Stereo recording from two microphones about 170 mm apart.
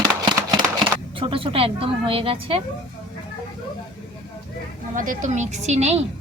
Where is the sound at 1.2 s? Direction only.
30° right (ahead or behind).